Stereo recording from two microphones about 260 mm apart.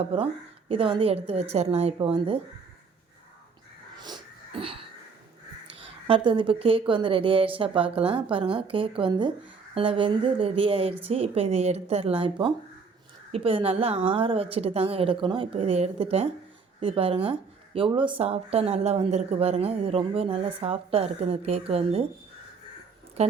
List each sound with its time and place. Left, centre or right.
0.0 s speech: right
4.0 s a sound: centre
5.6 s speech: right